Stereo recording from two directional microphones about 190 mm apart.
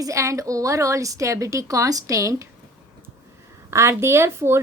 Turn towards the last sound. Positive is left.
turn(degrees=-15)  # may be behind; listen again after turning